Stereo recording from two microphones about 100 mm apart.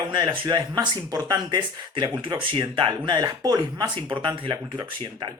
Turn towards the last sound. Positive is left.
turn(degrees=-45)  # may be behind; listen again after turning